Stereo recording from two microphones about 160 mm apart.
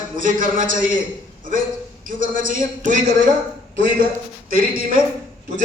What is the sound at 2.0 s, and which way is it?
Speech, 60° right (ahead or behind).